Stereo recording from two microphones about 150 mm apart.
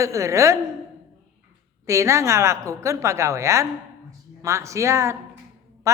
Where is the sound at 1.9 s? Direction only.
20° right (ahead or behind).